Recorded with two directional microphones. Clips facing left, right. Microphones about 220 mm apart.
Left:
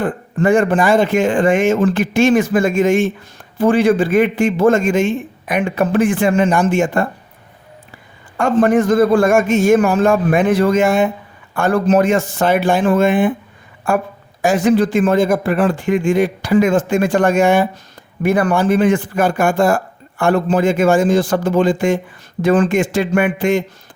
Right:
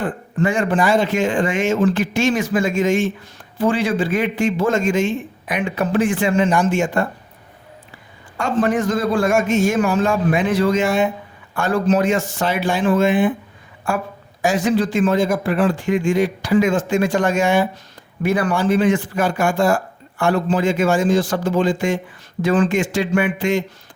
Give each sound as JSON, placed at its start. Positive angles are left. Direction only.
{"t": 0.0, "sound": "a man's voice", "side_deg": 50}
{"t": 8.4, "sound": "a man's voice", "side_deg": 55}
{"t": 14.4, "sound": "a man's voice", "side_deg": 55}